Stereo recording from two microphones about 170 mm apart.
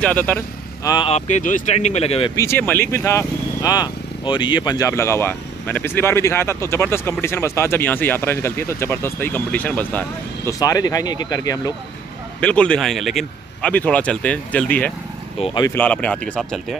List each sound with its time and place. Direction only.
0.0 s speech: 10° left (ahead or behind)
0.8 s speech: 25° left (ahead or behind)
1.1 s speech: 45° left (ahead or behind)
2.3 s speech: 15° left (ahead or behind)
10.6 s speech: 20° left (ahead or behind)
12.4 s speech: 5° left (ahead or behind)
15.4 s speech: 25° left (ahead or behind)
15.7 s speech: 10° left (ahead or behind)